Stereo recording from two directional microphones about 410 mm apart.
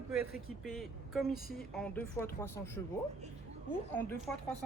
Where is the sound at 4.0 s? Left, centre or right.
Centre.